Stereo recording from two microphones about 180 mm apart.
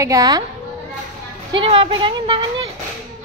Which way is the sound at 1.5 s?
30° right (ahead or behind).